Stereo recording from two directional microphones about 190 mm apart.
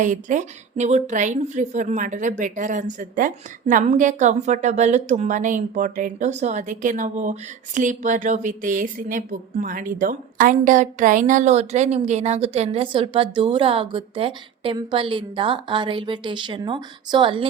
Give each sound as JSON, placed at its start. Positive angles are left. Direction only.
{"t": 0.0, "sound": "a woman's voice", "side_deg": -40}